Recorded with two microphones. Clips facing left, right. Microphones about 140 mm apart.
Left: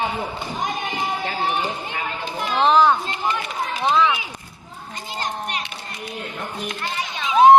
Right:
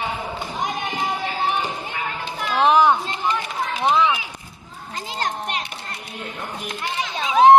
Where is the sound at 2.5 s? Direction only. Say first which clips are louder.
Even; 15° right (ahead or behind).